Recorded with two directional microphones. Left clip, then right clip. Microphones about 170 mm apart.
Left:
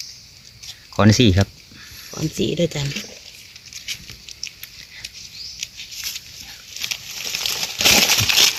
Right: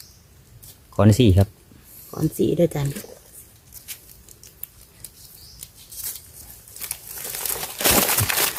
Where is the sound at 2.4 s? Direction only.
45° right (ahead or behind).